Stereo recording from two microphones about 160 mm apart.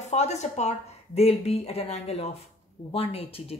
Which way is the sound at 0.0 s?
45° left (ahead or behind).